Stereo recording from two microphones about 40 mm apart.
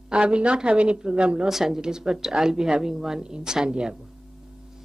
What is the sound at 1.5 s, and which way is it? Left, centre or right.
Speech, centre.